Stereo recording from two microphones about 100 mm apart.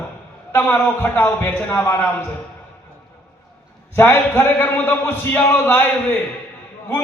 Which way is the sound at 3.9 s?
25° left (ahead or behind).